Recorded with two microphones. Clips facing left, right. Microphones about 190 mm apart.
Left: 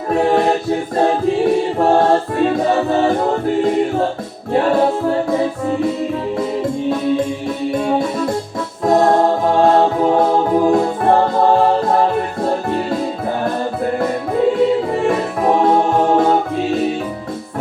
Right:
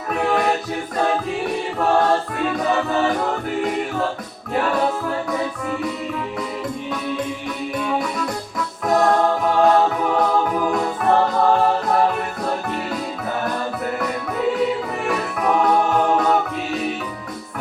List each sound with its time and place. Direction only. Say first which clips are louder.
0.1 s music: left 6 dB; 30° left (ahead or behind)
0.9 s choir: left 6 dB; 30° left (ahead or behind)
4.5 s music: left 6 dB; 30° left (ahead or behind)